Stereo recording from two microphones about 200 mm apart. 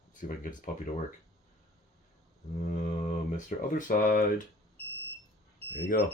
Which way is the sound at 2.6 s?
40° left (ahead or behind).